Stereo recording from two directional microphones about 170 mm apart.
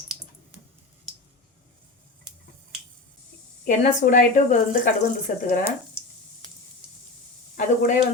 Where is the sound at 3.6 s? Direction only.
50° left (ahead or behind).